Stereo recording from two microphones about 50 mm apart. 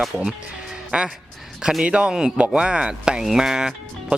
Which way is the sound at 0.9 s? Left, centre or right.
Right.